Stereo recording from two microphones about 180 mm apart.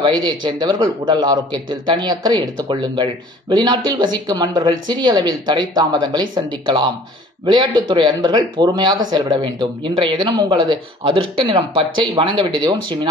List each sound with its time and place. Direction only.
0.0 s a man's voice: 25° right (ahead or behind)
7.4 s a man's voice: 25° right (ahead or behind)